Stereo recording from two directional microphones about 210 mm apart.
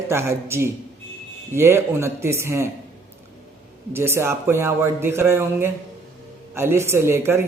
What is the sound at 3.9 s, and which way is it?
A man's voice, 10° right (ahead or behind).